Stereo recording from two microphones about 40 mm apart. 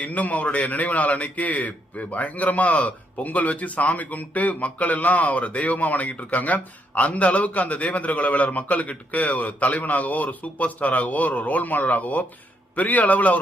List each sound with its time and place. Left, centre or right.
0.0 s a man's voice: left